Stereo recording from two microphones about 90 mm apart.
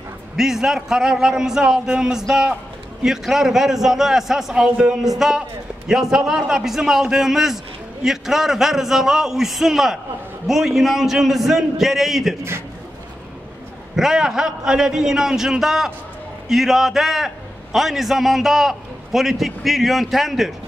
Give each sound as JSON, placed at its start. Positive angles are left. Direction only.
{"t": 0.4, "sound": "a man's voice", "side_deg": -5}
{"t": 13.9, "sound": "a man's voice", "side_deg": -5}